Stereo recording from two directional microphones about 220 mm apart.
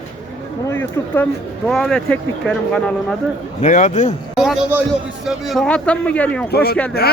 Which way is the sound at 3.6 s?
35° left (ahead or behind).